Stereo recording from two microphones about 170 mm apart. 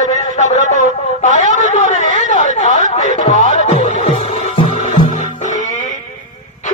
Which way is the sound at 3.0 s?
45° left (ahead or behind).